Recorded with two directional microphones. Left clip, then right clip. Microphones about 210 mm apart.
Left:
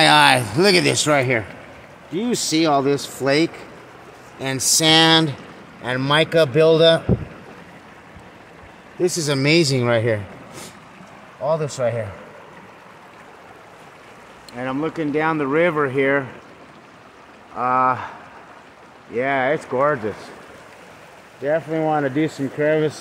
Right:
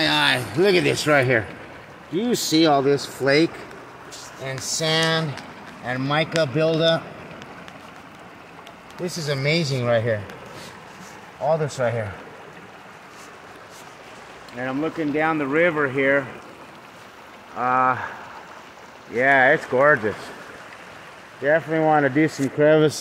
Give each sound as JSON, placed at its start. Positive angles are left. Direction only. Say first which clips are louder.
{"t": 0.0, "sound": "speech", "louder": "left 7 dB", "side_deg": 40}
{"t": 1.1, "sound": "speech", "louder": "even", "side_deg": 10}
{"t": 4.5, "sound": "a sound", "louder": "left 7 dB", "side_deg": 45}
{"t": 5.9, "sound": "speech", "louder": "left 5 dB", "side_deg": 40}
{"t": 9.0, "sound": "speech", "louder": "left 5 dB", "side_deg": 40}
{"t": 11.4, "sound": "speech", "louder": "left 1 dB", "side_deg": 10}
{"t": 14.6, "sound": "speech", "louder": "left 1 dB", "side_deg": 25}
{"t": 17.6, "sound": "speech", "louder": "left 2 dB", "side_deg": 10}
{"t": 19.1, "sound": "speech", "louder": "right 4 dB", "side_deg": 5}
{"t": 21.4, "sound": "speech", "louder": "right 1 dB", "side_deg": 0}
{"t": 22.6, "sound": "speech", "louder": "right 3 dB", "side_deg": -30}